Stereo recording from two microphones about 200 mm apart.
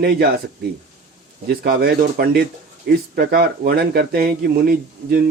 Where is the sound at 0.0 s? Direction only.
55° right (ahead or behind).